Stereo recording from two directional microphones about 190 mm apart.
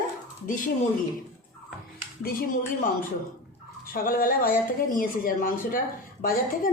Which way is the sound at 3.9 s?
50° left (ahead or behind).